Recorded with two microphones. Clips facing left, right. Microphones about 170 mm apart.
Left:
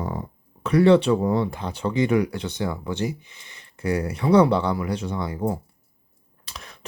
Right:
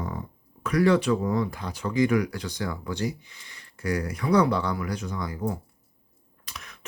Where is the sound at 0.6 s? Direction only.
30° left (ahead or behind).